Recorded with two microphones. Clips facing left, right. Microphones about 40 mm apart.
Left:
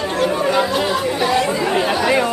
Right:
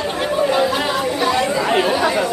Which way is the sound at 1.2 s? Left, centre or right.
Centre.